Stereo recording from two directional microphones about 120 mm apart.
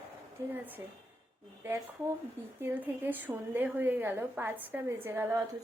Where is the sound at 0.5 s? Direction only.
15° right (ahead or behind).